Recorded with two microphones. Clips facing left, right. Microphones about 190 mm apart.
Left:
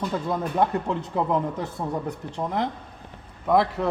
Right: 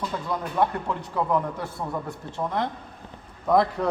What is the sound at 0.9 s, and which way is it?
Speech, 20° left (ahead or behind).